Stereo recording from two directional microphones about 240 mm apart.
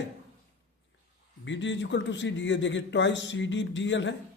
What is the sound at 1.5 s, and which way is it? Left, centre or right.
A man's voice, left.